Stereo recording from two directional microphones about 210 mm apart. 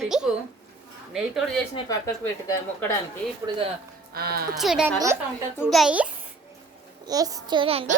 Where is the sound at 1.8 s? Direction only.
15° left (ahead or behind).